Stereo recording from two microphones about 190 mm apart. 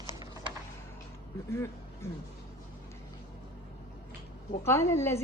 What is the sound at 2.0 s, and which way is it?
Speech, 15° left (ahead or behind).